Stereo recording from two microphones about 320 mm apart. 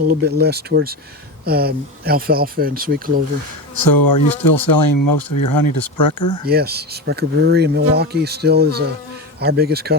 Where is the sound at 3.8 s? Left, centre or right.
Left.